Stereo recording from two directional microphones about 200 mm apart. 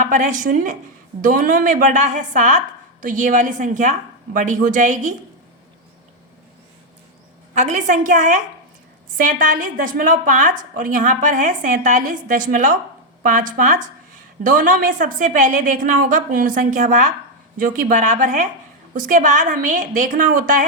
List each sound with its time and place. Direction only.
0.0 s a woman's voice: 40° right (ahead or behind)
7.5 s a woman's voice: 35° right (ahead or behind)